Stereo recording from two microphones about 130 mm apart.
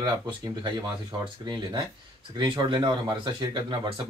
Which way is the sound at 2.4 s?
35° right (ahead or behind).